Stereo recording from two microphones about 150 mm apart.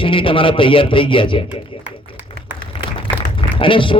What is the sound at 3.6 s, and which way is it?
Speech, 35° left (ahead or behind).